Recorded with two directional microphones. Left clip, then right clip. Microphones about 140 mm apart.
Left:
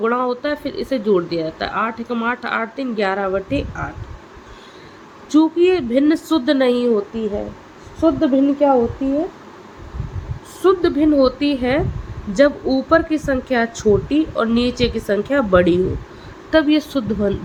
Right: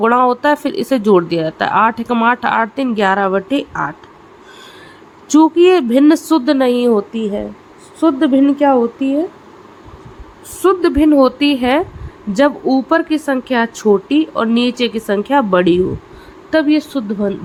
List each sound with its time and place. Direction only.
0.0 s speech: 55° right (ahead or behind)
5.3 s speech: 55° right (ahead or behind); by 6.9 s 35° right (ahead or behind)
6.9 s speech: 65° right (ahead or behind)
10.6 s a woman's voice: 45° right (ahead or behind); by 17.3 s 25° right (ahead or behind)